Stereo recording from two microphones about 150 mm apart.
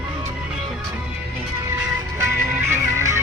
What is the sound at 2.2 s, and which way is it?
Music, 15° right (ahead or behind).